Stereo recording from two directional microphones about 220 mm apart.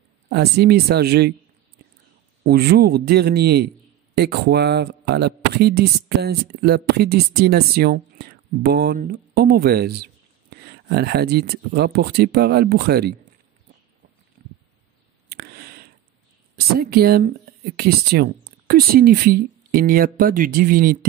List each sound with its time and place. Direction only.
0.3 s a man's voice: 45° right (ahead or behind)
2.4 s a man's voice: 45° right (ahead or behind)
14.4 s a sound: 40° right (ahead or behind)
16.5 s a man's voice: 45° right (ahead or behind)